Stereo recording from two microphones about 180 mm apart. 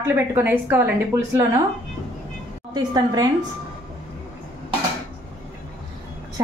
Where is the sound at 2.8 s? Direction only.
25° right (ahead or behind).